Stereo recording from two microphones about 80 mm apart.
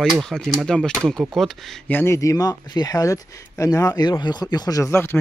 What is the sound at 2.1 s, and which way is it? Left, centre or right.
Speech, left.